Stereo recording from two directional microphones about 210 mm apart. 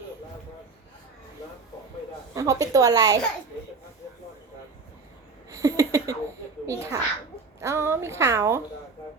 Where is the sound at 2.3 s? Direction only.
15° right (ahead or behind).